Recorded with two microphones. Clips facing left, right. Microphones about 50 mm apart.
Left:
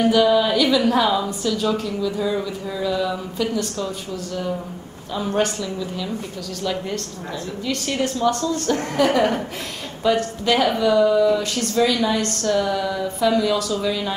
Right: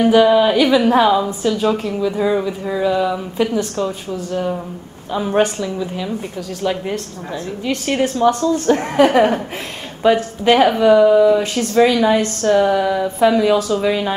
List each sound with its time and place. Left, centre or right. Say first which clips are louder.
0.0 s a woman's voice: right 5 dB; right